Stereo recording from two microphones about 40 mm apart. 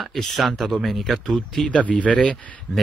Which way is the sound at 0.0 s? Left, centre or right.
Centre.